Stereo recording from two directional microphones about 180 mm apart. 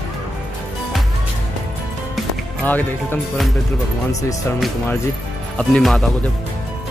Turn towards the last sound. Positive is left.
turn(degrees=0)  # may be behind; listen again after turning